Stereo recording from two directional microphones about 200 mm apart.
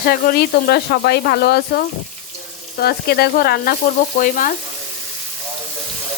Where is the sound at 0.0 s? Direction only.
50° left (ahead or behind).